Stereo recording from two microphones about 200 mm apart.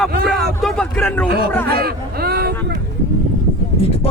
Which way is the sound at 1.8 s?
50° right (ahead or behind).